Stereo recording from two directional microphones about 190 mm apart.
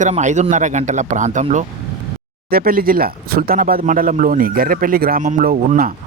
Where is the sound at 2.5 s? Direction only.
50° right (ahead or behind).